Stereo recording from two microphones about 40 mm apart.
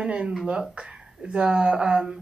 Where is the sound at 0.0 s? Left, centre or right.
Right.